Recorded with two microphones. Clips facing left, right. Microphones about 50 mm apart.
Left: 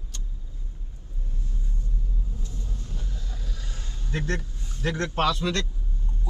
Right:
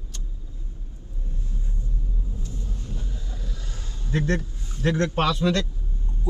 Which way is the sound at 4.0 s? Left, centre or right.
Centre.